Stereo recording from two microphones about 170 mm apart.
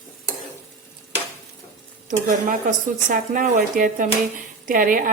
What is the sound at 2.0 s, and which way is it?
Speech, 50° right (ahead or behind).